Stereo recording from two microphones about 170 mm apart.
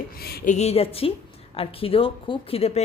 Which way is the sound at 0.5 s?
40° left (ahead or behind).